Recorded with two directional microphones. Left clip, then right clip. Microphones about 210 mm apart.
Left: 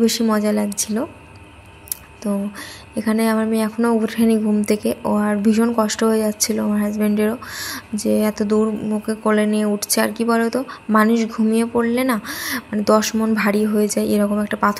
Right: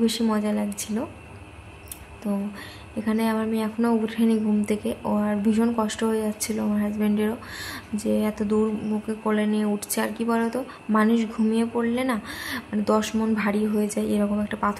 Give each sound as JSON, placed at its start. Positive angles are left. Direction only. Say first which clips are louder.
{"t": 0.0, "sound": "speech", "louder": "left 6 dB", "side_deg": 20}
{"t": 2.2, "sound": "speech", "louder": "left 6 dB", "side_deg": 25}